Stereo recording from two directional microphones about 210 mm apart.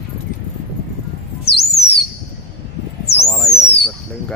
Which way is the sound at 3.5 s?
50° left (ahead or behind).